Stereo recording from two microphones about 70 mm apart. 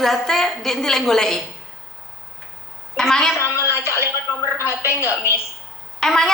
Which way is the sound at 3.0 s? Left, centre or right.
Centre.